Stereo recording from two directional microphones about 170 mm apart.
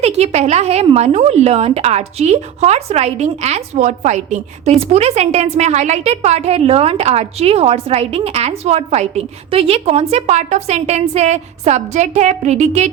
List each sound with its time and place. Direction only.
0.0 s a woman's voice: 40° right (ahead or behind)